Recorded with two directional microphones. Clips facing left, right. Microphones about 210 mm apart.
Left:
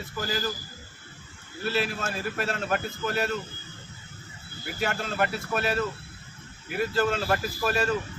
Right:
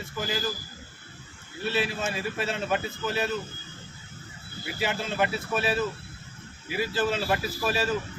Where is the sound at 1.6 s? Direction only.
Centre (ahead or behind).